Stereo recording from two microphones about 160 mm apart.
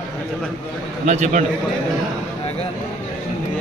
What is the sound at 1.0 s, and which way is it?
Speech, 45° right (ahead or behind).